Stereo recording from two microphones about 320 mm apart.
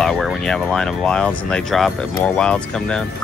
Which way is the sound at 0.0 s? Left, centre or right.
Centre.